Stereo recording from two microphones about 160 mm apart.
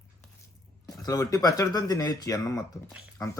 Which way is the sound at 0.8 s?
25° left (ahead or behind).